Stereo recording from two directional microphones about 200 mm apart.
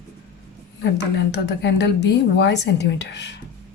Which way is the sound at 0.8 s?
60° left (ahead or behind).